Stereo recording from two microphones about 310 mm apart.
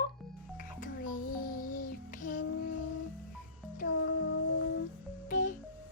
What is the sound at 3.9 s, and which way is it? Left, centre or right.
Music, left.